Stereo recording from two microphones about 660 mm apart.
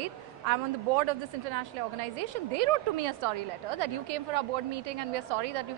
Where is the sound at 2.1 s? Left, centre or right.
Right.